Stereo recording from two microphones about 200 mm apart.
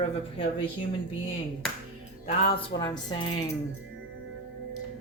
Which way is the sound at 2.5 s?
20° left (ahead or behind).